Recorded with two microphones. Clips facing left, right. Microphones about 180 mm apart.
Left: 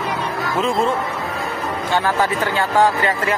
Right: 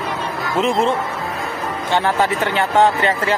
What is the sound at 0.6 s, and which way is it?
Speech, 25° right (ahead or behind).